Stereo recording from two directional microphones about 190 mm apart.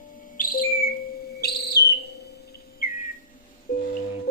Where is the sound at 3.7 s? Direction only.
50° left (ahead or behind).